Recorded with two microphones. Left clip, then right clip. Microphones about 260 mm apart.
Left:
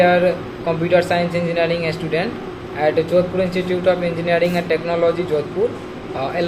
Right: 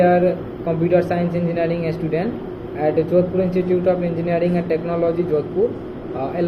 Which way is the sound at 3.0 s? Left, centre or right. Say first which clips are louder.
Right 1 dB; left.